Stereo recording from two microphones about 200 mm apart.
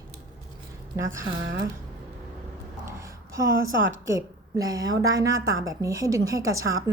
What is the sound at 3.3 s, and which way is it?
A woman's voice, 15° right (ahead or behind).